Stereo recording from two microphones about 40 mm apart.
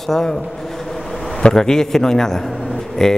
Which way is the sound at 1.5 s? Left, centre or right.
Centre.